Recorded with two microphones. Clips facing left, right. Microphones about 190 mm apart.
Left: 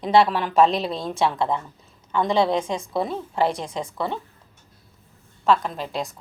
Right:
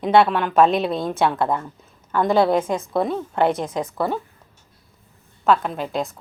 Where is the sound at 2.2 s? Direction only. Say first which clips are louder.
Right 3 dB; 5° right (ahead or behind).